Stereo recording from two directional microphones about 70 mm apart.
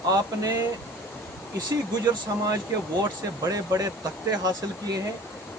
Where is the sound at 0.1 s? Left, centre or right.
Right.